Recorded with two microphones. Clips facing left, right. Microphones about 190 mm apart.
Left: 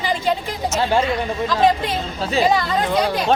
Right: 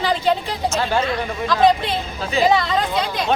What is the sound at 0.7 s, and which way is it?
Speech, 20° left (ahead or behind).